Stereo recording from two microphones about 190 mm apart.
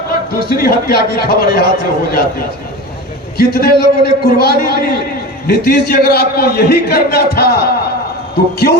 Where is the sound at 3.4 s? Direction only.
55° left (ahead or behind).